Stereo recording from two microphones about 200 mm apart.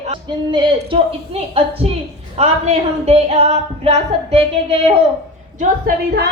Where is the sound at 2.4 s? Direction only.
30° right (ahead or behind).